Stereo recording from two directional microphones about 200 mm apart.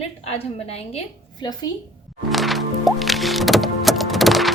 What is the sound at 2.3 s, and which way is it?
Music, centre (ahead or behind).